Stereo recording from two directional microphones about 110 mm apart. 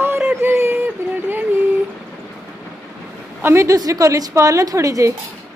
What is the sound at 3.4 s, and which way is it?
A woman's voice, 25° right (ahead or behind).